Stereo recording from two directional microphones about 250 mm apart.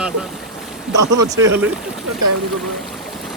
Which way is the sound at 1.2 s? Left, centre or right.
Centre.